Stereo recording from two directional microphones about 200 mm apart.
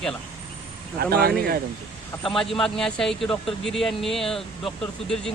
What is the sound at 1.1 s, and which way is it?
Speech, 50° right (ahead or behind).